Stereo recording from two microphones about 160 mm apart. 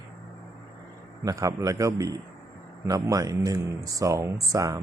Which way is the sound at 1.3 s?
20° right (ahead or behind).